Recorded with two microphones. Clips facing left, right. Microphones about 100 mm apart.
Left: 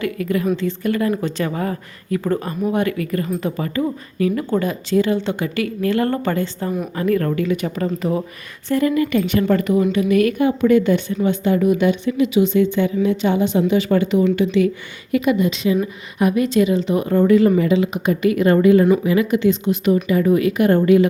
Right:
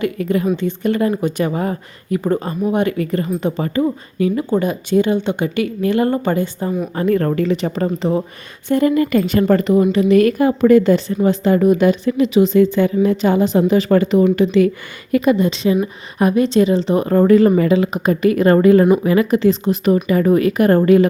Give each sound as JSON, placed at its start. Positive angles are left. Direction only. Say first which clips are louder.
{"t": 0.0, "sound": "speech", "louder": "right 2 dB", "side_deg": -25}
{"t": 6.9, "sound": "a woman's voice", "louder": "right 2 dB", "side_deg": -30}
{"t": 9.1, "sound": "a woman's voice", "louder": "right 3 dB", "side_deg": -40}